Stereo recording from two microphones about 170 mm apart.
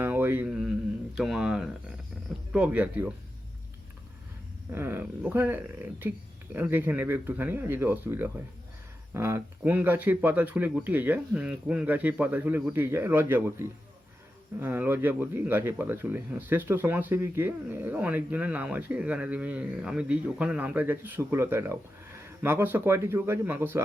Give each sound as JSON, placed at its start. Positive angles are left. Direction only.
{"t": 0.0, "sound": "a sound", "side_deg": -15}
{"t": 1.1, "sound": "speech", "side_deg": 0}
{"t": 4.7, "sound": "speech", "side_deg": -15}